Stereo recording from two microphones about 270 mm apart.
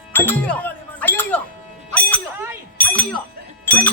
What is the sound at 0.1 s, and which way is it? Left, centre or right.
Music, centre.